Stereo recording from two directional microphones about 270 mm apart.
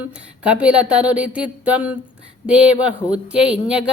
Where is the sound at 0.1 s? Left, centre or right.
Centre.